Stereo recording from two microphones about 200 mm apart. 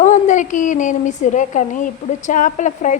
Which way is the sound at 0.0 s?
40° left (ahead or behind).